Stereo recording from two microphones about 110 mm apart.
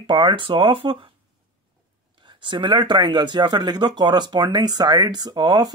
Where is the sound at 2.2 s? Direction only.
45° right (ahead or behind).